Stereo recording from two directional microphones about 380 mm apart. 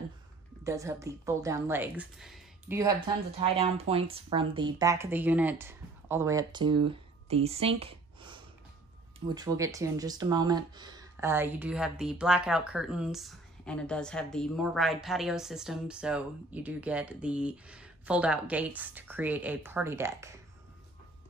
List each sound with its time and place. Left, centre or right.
0.7 s a woman's voice: centre
6.9 s a sound: centre
9.3 s speech: centre